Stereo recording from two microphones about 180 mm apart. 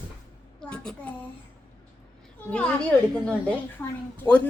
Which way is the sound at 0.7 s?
5° left (ahead or behind).